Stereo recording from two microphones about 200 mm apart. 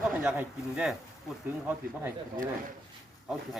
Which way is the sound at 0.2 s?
5° right (ahead or behind).